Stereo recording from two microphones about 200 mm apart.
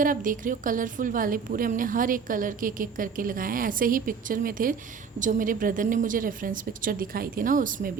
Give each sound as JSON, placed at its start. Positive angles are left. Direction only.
{"t": 0.0, "sound": "a woman's voice", "side_deg": -45}